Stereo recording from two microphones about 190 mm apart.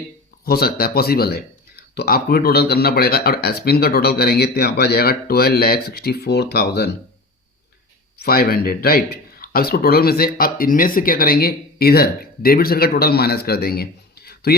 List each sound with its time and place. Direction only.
0.4 s speech: 55° left (ahead or behind)
8.2 s speech: 55° left (ahead or behind)